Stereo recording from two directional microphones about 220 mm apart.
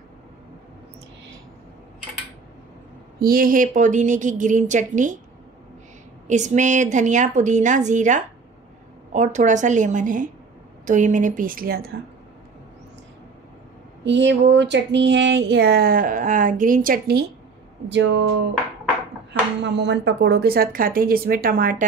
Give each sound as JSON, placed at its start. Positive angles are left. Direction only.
{"t": 3.2, "sound": "a woman's voice", "side_deg": -40}
{"t": 6.2, "sound": "a woman's voice", "side_deg": -35}
{"t": 14.0, "sound": "speech", "side_deg": -55}
{"t": 17.8, "sound": "speech", "side_deg": -55}
{"t": 19.6, "sound": "speech", "side_deg": -50}